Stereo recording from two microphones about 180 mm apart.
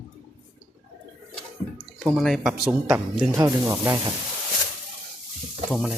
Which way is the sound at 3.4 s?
20° right (ahead or behind).